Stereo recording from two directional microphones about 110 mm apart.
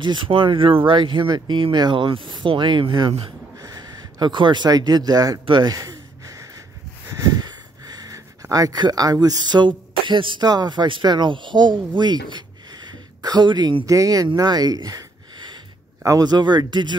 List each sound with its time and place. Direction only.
0.0 s speech: 45° right (ahead or behind)
3.5 s speech: 35° right (ahead or behind)
5.4 s speech: 50° right (ahead or behind)
5.7 s gasp: 35° right (ahead or behind)
7.1 s speech: 35° right (ahead or behind)
13.8 s speech: 30° right (ahead or behind)